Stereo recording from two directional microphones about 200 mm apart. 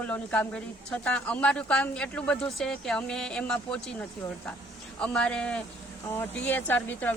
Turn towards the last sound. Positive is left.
turn(degrees=10)  # may be behind; listen again after turning